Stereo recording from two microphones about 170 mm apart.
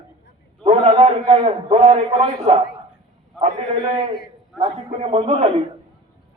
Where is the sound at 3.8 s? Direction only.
25° right (ahead or behind).